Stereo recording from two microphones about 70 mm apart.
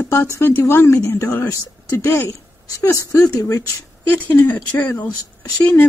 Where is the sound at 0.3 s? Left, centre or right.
Left.